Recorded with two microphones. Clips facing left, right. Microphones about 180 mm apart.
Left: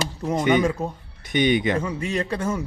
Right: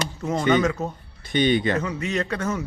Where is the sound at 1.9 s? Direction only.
30° left (ahead or behind).